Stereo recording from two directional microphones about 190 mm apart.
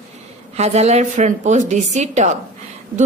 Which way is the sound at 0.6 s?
35° right (ahead or behind).